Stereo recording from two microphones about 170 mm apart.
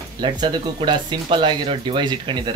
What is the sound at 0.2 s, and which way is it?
Speech, 25° right (ahead or behind).